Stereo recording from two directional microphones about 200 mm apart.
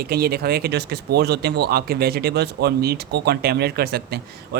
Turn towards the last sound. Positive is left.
turn(degrees=-50)  # may be behind; listen again after turning